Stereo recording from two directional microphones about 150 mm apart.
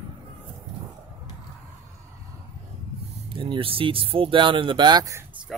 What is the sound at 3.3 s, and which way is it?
Speech, 35° right (ahead or behind).